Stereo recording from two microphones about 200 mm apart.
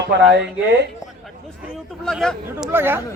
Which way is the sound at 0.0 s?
60° right (ahead or behind).